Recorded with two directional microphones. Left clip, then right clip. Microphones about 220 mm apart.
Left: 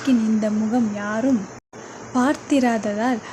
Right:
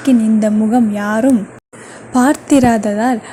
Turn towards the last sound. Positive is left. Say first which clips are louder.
# right 8 dB
turn(degrees=-20)  # may be behind; listen again after turning